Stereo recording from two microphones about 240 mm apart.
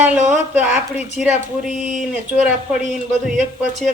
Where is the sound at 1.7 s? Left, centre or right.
Left.